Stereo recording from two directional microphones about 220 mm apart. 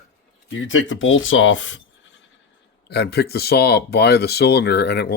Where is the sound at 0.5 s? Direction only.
60° left (ahead or behind).